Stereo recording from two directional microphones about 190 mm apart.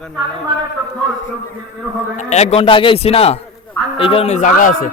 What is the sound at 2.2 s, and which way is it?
A man's voice, 35° left (ahead or behind).